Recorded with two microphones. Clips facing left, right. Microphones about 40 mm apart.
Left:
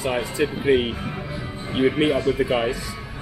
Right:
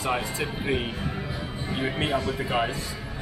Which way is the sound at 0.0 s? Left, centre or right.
Centre.